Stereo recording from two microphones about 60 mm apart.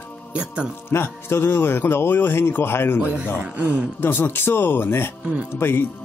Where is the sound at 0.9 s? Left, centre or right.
Left.